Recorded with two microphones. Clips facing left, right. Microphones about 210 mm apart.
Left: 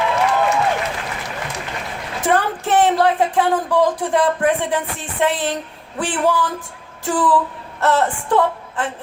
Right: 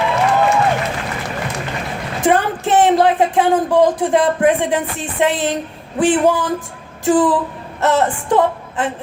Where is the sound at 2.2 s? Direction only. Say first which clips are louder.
Right 3 dB; 25° right (ahead or behind).